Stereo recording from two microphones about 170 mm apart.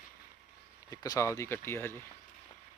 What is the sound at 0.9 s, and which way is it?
Speech, 20° left (ahead or behind).